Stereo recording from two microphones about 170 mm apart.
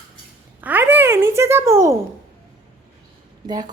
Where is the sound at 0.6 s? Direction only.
10° right (ahead or behind).